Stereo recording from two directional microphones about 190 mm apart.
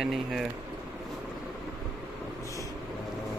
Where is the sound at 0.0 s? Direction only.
Centre (ahead or behind).